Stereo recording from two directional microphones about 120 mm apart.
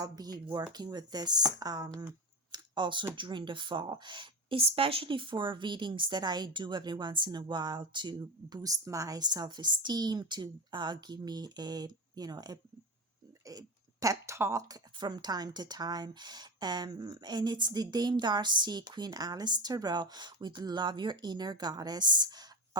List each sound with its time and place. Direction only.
0.0 s speech: 35° right (ahead or behind)
14.9 s speech: 35° right (ahead or behind)